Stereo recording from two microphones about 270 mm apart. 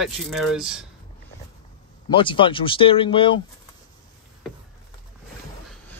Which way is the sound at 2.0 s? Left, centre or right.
Centre.